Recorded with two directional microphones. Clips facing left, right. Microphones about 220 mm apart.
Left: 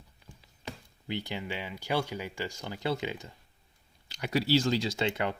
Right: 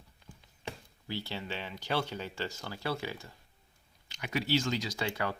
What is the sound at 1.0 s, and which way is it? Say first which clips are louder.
Speech: left 3 dB; 15° left (ahead or behind).